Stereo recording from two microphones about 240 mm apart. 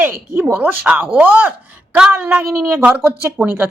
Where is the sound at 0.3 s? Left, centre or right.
Centre.